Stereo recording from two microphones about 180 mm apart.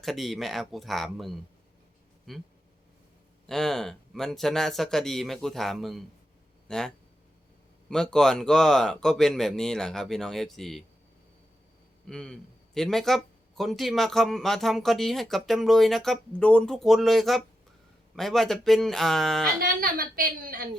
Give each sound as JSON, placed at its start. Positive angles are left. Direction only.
{"t": 0.0, "sound": "a man's voice", "side_deg": 0}
{"t": 3.5, "sound": "a man's voice", "side_deg": 0}
{"t": 12.0, "sound": "a man's voice", "side_deg": 5}
{"t": 19.5, "sound": "a woman's voice", "side_deg": -55}